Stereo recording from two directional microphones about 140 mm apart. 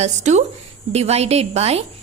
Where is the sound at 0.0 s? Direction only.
55° right (ahead or behind).